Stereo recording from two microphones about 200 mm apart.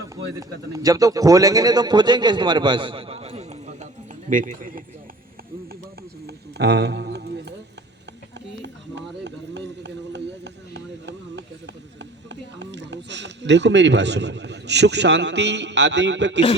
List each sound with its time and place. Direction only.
0.3 s speech: 15° right (ahead or behind); by 4.8 s 40° right (ahead or behind)
6.2 s clip-clop: 55° right (ahead or behind)
8.6 s run: 60° right (ahead or behind)